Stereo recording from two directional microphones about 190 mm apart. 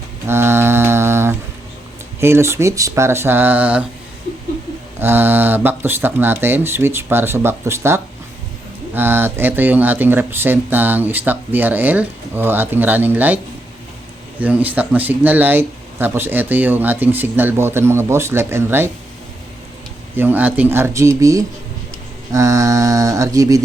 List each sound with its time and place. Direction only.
0.3 s mantra: 10° right (ahead or behind)
2.2 s speech: 15° right (ahead or behind)
4.9 s speech: 10° right (ahead or behind)
20.1 s speech: 10° right (ahead or behind)